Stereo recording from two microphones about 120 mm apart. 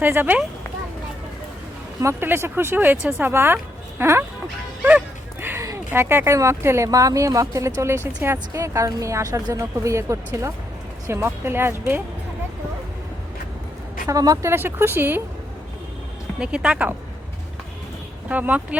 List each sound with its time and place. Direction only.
0.0 s speech: 15° right (ahead or behind)
2.0 s speech: 20° right (ahead or behind)
4.8 s dog: 15° right (ahead or behind)
5.6 s speech: 20° right (ahead or behind)
14.1 s speech: 30° right (ahead or behind)
14.5 s speech: 20° right (ahead or behind)
16.4 s speech: 10° right (ahead or behind)
18.3 s speech: 10° right (ahead or behind)